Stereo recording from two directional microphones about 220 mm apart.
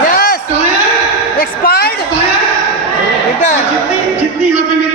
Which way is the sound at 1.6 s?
45° left (ahead or behind).